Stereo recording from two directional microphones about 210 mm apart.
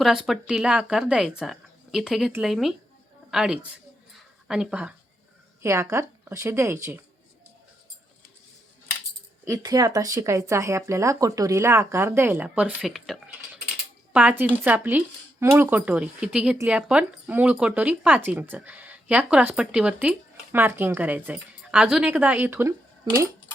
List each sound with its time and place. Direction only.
0.0 s a woman's voice: centre (ahead or behind)
9.5 s speech: 15° right (ahead or behind)